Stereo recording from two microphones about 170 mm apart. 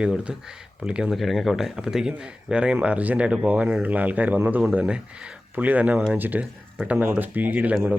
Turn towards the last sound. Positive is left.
turn(degrees=-10)  # may be behind; listen again after turning